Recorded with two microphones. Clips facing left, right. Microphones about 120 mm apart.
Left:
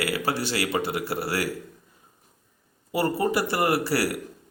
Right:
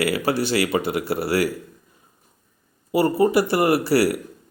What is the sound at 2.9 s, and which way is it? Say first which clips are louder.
Speech: right 6 dB; 15° right (ahead or behind).